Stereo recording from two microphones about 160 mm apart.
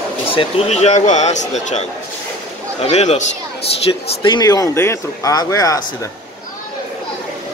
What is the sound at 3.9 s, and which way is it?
Speech, 30° left (ahead or behind).